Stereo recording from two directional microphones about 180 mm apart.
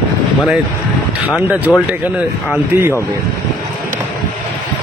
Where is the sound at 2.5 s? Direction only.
15° right (ahead or behind).